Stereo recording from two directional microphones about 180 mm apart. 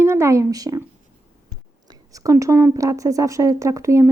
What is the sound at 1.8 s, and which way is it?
A woman's voice, 20° right (ahead or behind).